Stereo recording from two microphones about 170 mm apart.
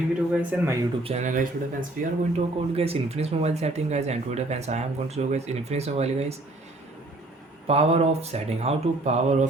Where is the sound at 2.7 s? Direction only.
35° right (ahead or behind).